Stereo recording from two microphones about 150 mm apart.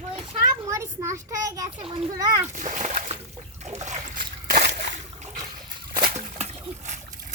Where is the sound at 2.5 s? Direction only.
55° right (ahead or behind).